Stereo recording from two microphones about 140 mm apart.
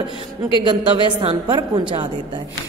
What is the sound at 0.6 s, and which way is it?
Speech, 35° right (ahead or behind).